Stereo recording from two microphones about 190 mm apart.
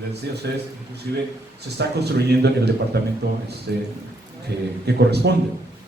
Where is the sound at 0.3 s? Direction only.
60° right (ahead or behind).